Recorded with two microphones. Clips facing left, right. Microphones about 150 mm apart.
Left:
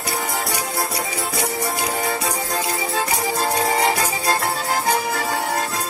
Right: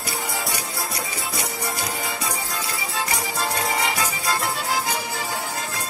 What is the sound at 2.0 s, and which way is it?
Music, 45° left (ahead or behind).